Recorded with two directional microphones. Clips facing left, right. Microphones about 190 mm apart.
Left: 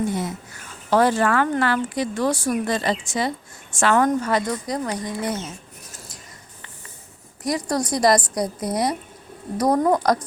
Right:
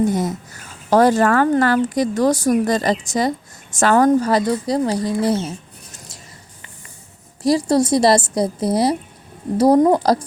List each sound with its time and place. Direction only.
0.0 s speech: 40° right (ahead or behind)
7.4 s a woman's voice: 30° right (ahead or behind)